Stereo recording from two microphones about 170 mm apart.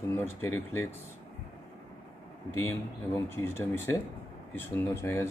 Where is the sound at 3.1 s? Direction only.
15° left (ahead or behind).